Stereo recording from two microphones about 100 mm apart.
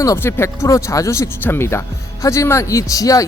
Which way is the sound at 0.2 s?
25° left (ahead or behind).